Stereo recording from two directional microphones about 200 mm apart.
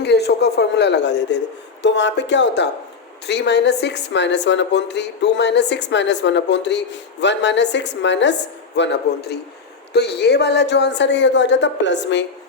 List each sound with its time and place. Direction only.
0.0 s a woman's voice: 55° left (ahead or behind)